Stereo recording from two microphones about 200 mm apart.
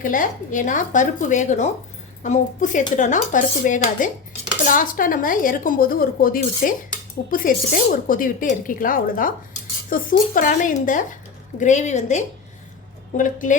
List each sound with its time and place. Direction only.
0.0 s a woman's voice: 40° left (ahead or behind)